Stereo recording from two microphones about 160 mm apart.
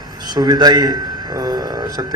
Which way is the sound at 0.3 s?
25° right (ahead or behind).